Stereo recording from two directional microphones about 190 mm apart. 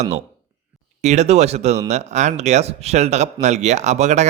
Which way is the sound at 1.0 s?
35° right (ahead or behind).